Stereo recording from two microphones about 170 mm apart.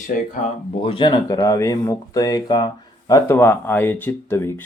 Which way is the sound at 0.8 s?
30° left (ahead or behind).